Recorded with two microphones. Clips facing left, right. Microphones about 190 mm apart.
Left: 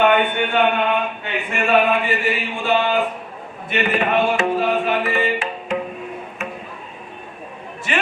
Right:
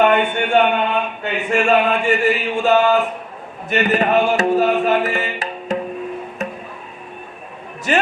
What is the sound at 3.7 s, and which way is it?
Music, 40° right (ahead or behind).